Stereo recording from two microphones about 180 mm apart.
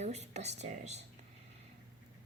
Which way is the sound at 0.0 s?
40° right (ahead or behind).